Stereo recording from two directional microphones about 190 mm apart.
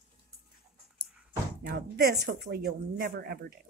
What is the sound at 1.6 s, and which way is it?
Speech, 55° right (ahead or behind).